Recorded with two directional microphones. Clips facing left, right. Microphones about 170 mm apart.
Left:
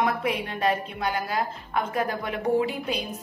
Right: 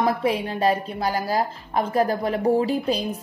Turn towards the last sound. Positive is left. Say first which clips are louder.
# right 4 dB
turn(degrees=-35)  # may be behind; listen again after turning